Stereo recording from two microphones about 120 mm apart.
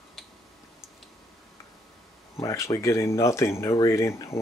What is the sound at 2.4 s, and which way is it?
Speech, 25° left (ahead or behind).